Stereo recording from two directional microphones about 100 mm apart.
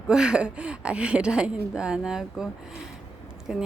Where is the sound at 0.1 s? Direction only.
10° right (ahead or behind).